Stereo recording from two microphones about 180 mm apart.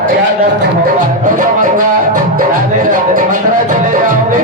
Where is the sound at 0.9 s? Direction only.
45° right (ahead or behind).